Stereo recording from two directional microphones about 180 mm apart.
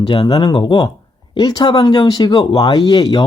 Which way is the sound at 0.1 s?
25° left (ahead or behind).